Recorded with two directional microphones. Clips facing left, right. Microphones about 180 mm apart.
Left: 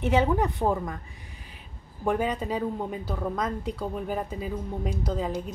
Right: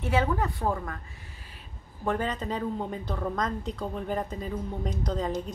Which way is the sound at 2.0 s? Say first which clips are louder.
Left 3 dB; 10° left (ahead or behind).